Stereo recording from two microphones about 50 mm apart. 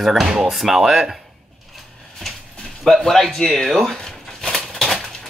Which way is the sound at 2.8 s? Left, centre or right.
Centre.